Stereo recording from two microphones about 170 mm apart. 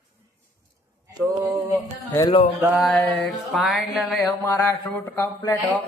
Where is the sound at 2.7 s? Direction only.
Centre (ahead or behind).